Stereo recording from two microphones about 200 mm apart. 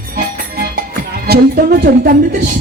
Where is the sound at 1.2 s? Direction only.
50° right (ahead or behind).